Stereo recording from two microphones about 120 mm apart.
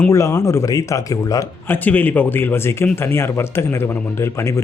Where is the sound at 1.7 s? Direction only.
15° left (ahead or behind).